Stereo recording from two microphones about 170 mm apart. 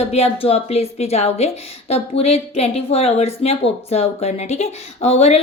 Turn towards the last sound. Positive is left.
turn(degrees=40)  # may be behind; listen again after turning